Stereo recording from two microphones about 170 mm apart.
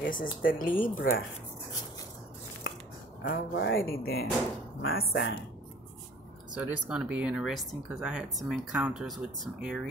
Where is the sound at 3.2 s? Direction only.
90° left; by 4.3 s 65° left (ahead or behind).